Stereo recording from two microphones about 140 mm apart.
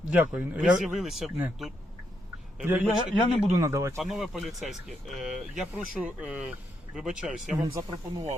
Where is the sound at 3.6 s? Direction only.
20° right (ahead or behind).